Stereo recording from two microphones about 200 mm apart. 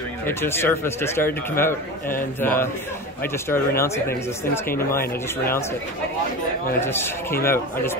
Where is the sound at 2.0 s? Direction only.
45° left (ahead or behind).